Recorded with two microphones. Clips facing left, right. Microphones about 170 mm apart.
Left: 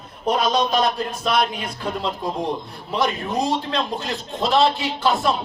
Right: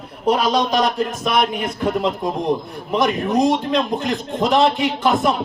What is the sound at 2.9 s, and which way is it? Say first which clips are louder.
A man's voice: right 5 dB; 15° right (ahead or behind).